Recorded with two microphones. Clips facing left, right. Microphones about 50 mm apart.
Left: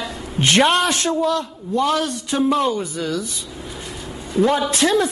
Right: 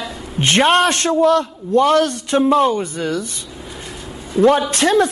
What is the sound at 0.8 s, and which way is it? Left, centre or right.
A man's voice, right.